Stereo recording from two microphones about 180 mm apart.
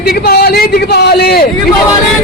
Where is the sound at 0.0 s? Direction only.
60° left (ahead or behind).